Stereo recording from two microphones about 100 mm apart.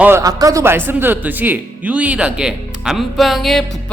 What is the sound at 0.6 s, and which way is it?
Speech, 25° right (ahead or behind).